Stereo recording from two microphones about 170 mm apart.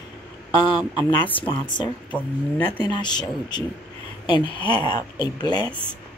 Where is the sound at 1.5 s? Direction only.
25° left (ahead or behind).